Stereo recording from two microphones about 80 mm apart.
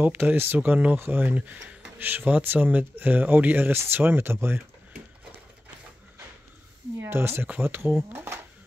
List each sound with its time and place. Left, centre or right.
0.0 s speech: right
7.0 s speech: right